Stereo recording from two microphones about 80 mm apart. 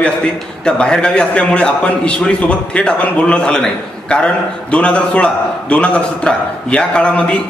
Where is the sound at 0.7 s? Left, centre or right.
Centre.